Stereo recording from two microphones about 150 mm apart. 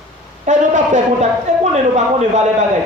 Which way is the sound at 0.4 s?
55° right (ahead or behind).